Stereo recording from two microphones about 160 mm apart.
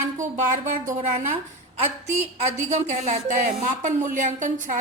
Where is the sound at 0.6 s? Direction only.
50° right (ahead or behind).